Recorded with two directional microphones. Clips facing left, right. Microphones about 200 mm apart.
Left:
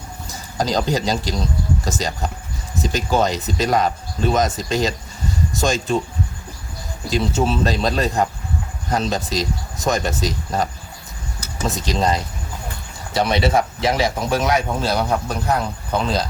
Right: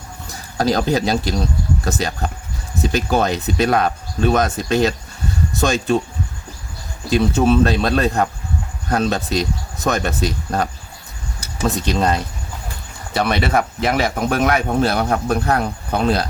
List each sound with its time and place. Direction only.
0.3 s speech: 60° right (ahead or behind)
7.1 s speech: 55° right (ahead or behind)
11.7 s speech: 60° right (ahead or behind)
13.2 s speech: 60° right (ahead or behind)